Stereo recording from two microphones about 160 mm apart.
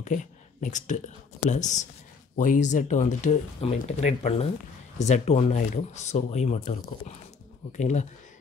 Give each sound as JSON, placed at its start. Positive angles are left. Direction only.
{"t": 0.0, "sound": "speech", "side_deg": 50}
{"t": 7.7, "sound": "speech", "side_deg": 45}